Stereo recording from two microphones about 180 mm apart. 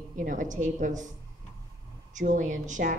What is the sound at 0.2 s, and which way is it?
Speech, 45° right (ahead or behind).